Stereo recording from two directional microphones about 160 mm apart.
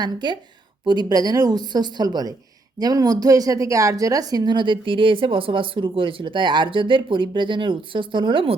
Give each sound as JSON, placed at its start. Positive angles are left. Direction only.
{"t": 0.0, "sound": "a woman's voice", "side_deg": -25}